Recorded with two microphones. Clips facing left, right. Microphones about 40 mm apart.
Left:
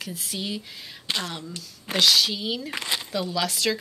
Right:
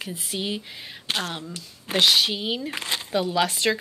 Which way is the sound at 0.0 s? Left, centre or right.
Right.